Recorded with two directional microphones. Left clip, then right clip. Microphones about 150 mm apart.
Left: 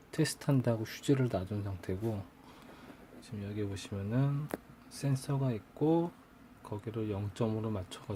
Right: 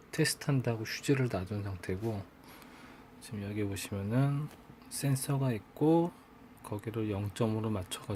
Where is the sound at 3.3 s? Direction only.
5° right (ahead or behind).